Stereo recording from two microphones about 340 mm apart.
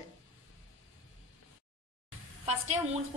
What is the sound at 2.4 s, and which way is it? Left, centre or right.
Speech, centre.